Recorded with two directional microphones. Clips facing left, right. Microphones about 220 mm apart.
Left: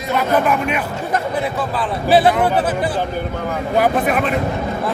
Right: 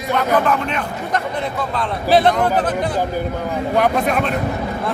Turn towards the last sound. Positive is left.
turn(degrees=5)  # may be behind; listen again after turning